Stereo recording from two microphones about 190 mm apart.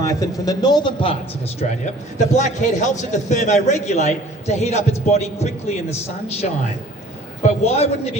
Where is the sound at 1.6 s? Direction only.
40° left (ahead or behind).